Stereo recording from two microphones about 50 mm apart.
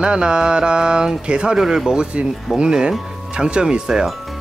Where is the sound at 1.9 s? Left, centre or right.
Right.